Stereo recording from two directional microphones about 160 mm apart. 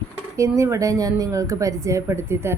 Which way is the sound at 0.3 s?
20° right (ahead or behind).